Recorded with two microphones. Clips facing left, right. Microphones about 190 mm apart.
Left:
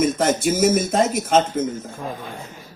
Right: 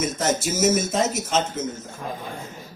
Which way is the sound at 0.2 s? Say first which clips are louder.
Left 4 dB; 55° left (ahead or behind).